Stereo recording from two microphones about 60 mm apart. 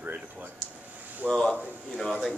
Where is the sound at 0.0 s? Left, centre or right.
Right.